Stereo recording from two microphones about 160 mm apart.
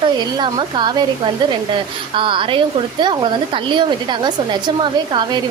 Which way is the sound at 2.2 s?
30° right (ahead or behind).